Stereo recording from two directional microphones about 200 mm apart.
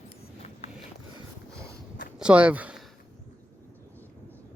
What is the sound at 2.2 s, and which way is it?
Speech, 5° right (ahead or behind).